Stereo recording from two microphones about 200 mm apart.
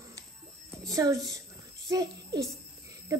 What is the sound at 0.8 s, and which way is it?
A child's voice, 15° right (ahead or behind).